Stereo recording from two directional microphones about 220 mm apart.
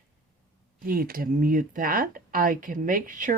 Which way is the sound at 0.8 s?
40° right (ahead or behind).